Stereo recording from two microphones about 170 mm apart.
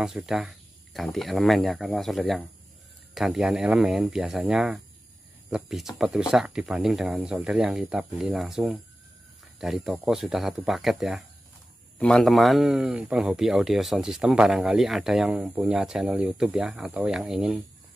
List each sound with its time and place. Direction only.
0.0 s speech: 5° right (ahead or behind)